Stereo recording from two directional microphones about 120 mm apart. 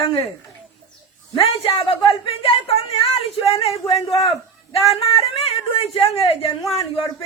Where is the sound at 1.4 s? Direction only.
55° left (ahead or behind).